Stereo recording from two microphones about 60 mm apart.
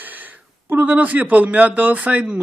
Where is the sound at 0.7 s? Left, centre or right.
Right.